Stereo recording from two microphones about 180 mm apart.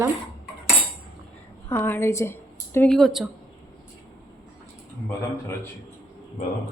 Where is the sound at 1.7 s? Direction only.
15° left (ahead or behind).